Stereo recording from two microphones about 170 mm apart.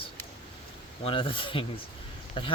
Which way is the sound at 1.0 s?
30° left (ahead or behind).